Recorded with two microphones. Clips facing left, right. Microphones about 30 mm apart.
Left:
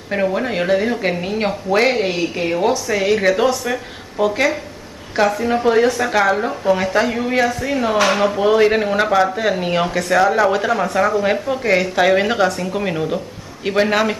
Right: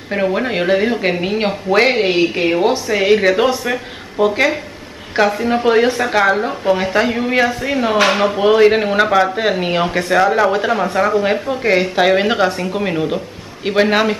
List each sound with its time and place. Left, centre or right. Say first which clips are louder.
0.1 s speech: right 2 dB; centre
5.4 s speech: right 1 dB; right
11.6 s speech: right 2 dB; right
12.7 s speech: right 2 dB; centre